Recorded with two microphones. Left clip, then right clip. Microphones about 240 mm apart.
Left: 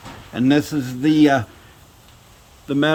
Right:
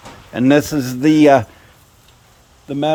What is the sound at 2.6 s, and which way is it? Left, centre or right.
Speech, centre.